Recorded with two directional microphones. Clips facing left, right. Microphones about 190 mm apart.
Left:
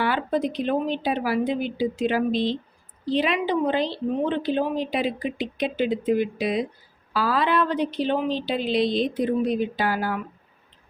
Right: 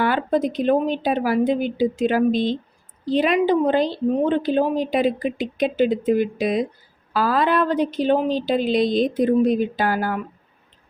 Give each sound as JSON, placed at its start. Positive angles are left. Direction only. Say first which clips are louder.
{"t": 0.0, "sound": "speech", "louder": "right 4 dB", "side_deg": -45}